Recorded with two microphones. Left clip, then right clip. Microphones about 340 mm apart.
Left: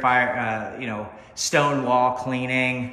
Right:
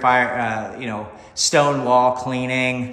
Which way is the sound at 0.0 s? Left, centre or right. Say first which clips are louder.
Right 3 dB; centre.